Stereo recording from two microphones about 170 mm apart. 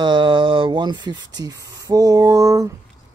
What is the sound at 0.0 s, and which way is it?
Speech, 30° right (ahead or behind).